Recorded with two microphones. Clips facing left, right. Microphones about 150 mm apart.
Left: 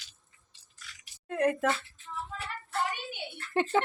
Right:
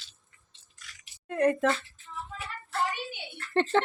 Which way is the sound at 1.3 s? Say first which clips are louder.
Right 3 dB; 5° left (ahead or behind).